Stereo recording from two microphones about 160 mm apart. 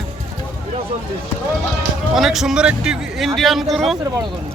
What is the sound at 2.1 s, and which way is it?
Speech, centre (ahead or behind).